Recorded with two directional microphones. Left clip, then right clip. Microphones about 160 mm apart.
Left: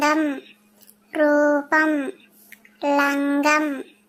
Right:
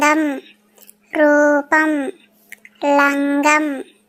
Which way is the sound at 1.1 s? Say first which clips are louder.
Right 5 dB; 25° right (ahead or behind).